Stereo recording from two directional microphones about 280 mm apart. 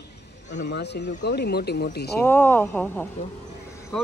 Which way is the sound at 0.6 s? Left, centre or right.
Left.